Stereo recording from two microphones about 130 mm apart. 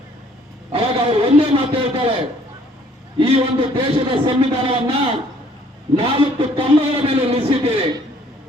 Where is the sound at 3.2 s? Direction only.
50° right (ahead or behind).